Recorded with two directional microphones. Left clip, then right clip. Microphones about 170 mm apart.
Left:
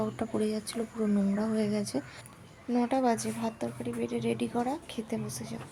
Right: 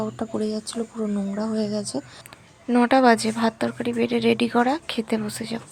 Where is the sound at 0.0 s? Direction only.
15° right (ahead or behind).